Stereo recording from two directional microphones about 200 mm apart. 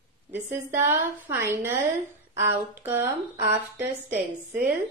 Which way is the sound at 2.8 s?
10° right (ahead or behind).